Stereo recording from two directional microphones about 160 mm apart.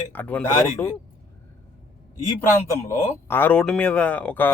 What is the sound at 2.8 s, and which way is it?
Speech, 15° left (ahead or behind).